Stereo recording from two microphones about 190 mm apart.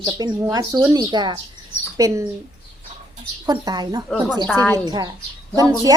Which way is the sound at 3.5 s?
20° right (ahead or behind).